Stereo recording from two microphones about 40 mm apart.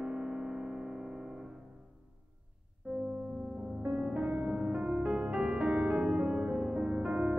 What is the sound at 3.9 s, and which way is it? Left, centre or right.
Music, right.